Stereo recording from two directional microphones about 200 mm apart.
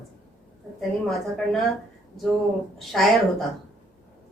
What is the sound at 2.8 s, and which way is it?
Speech, centre (ahead or behind).